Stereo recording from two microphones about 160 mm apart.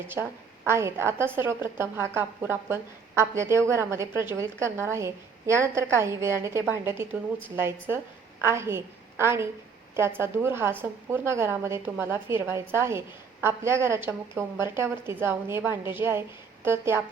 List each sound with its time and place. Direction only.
0.1 s a woman's voice: 15° right (ahead or behind)